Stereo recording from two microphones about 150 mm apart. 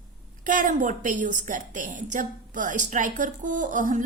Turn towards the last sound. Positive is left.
turn(degrees=-60)  # may be behind; listen again after turning